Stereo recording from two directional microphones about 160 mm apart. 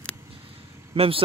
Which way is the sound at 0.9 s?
35° right (ahead or behind).